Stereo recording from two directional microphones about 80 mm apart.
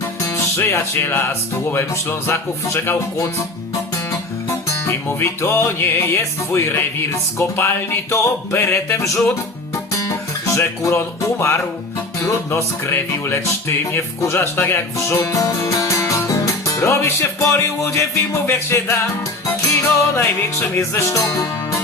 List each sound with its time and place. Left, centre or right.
0.2 s speech: left
5.0 s speech: left
9.7 s music: left
12.9 s speech: left
20.1 s speech: left